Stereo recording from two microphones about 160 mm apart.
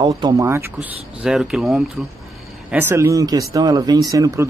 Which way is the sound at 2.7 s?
15° right (ahead or behind).